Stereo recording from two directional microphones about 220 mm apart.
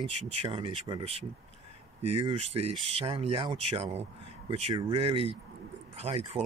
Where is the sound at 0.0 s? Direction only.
25° right (ahead or behind).